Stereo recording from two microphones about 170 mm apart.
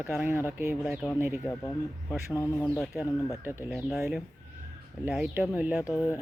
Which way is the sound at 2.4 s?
20° left (ahead or behind).